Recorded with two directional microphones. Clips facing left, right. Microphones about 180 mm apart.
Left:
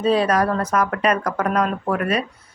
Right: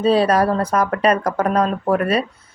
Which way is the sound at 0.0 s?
30° right (ahead or behind).